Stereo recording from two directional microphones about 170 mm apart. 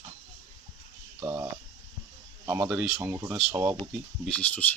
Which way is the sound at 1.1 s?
15° right (ahead or behind).